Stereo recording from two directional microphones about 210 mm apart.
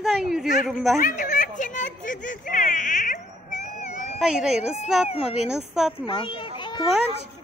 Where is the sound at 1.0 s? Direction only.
35° left (ahead or behind).